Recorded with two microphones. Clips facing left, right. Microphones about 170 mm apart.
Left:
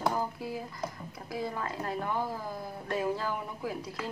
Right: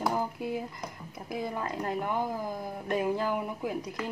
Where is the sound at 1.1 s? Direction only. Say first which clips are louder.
Right 5 dB; 20° right (ahead or behind).